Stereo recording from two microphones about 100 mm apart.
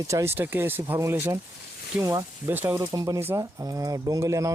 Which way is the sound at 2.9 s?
35° right (ahead or behind).